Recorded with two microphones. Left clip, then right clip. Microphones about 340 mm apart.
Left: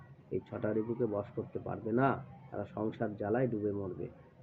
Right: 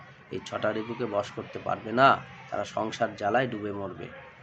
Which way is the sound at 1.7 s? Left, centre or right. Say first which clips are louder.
Right 11 dB; centre.